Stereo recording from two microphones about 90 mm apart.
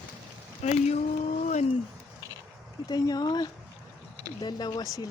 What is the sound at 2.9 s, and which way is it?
Speech, 50° left (ahead or behind).